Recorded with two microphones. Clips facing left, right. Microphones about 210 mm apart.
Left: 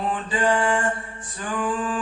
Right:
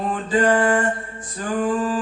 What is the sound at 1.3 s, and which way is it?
Music, 40° right (ahead or behind).